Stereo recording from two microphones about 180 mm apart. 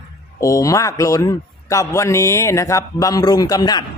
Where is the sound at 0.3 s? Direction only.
20° left (ahead or behind).